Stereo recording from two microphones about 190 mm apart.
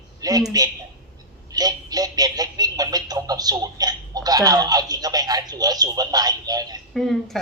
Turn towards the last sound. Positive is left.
turn(degrees=0)  # may be behind; listen again after turning